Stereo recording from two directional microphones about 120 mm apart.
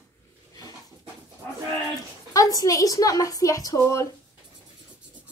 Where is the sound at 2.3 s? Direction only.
30° left (ahead or behind).